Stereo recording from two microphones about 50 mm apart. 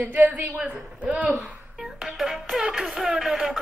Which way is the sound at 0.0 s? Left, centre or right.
Right.